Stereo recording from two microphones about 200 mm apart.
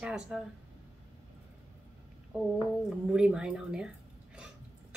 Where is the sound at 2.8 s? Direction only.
5° right (ahead or behind).